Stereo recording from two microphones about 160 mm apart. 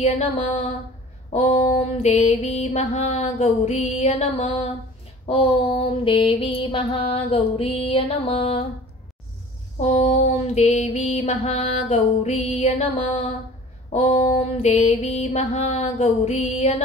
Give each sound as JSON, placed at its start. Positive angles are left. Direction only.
{"t": 0.0, "sound": "mantra", "side_deg": 40}
{"t": 9.8, "sound": "mantra", "side_deg": 45}